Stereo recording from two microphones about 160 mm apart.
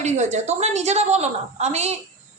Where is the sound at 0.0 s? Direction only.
45° right (ahead or behind).